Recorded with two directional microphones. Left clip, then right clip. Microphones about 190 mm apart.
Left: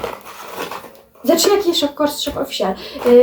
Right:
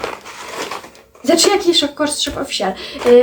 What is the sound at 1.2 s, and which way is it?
Speech, centre (ahead or behind).